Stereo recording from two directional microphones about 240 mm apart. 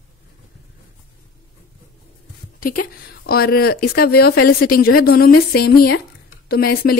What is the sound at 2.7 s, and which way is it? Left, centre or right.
Speech, left.